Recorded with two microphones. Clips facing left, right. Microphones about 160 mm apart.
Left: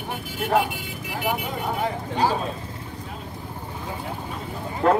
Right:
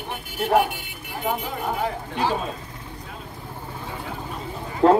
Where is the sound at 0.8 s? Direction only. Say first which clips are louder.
Left 1 dB; 90° left.